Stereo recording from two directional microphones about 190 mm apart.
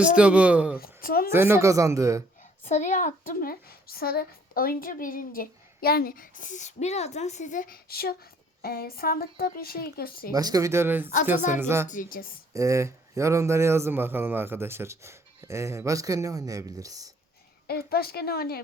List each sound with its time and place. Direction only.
0.2 s a man's voice: 5° right (ahead or behind)
0.8 s speech: 50° left (ahead or behind)
1.3 s a man's voice: 10° right (ahead or behind)
2.6 s a woman's voice: 40° left (ahead or behind)
10.3 s a man's voice: 20° right (ahead or behind)
11.9 s a woman's voice: 45° left (ahead or behind)
12.5 s a man's voice: 15° right (ahead or behind)
17.7 s speech: 55° left (ahead or behind)